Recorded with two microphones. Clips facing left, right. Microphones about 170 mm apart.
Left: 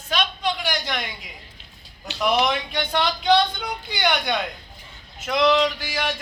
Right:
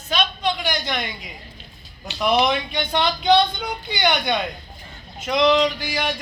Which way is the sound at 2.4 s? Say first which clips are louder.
Right 4 dB; 10° right (ahead or behind).